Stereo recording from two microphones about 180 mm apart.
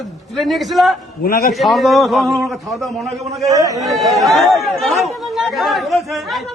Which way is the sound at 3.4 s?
20° right (ahead or behind).